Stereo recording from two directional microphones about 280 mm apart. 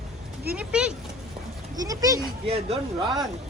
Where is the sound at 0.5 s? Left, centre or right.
Centre.